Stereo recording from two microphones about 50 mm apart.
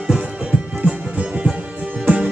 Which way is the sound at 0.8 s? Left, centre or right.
Right.